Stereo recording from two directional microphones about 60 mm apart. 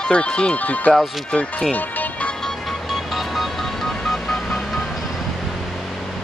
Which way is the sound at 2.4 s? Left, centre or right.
Centre.